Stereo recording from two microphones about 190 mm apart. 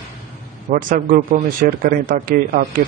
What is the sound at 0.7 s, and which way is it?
Speech, 45° right (ahead or behind).